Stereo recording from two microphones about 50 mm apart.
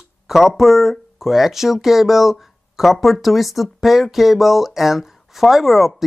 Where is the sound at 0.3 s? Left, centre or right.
Centre.